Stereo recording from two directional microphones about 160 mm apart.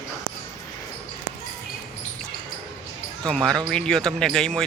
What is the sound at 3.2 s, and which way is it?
Speech, 5° left (ahead or behind).